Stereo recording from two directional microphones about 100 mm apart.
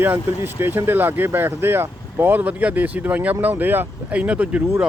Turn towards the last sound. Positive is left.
turn(degrees=-15)  # may be behind; listen again after turning